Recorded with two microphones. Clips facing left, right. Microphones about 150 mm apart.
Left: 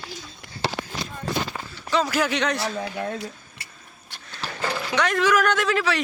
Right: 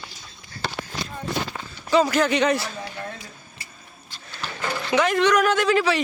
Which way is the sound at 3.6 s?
70° left (ahead or behind).